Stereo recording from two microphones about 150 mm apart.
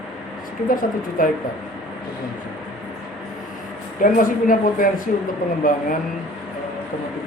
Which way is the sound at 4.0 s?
65° left (ahead or behind).